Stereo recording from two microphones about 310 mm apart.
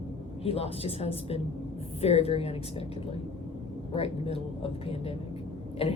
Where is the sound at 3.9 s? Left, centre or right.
Centre.